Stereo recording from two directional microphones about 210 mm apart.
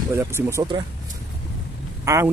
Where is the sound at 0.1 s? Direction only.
15° right (ahead or behind).